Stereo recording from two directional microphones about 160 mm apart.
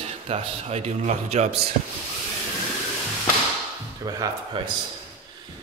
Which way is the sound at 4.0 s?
25° right (ahead or behind).